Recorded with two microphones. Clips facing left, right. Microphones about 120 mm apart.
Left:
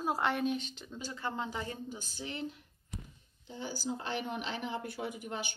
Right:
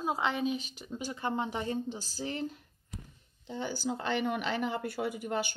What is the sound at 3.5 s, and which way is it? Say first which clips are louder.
Speech: right 4 dB; 60° right (ahead or behind).